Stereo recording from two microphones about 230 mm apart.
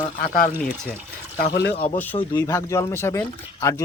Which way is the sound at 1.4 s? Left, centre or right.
Left.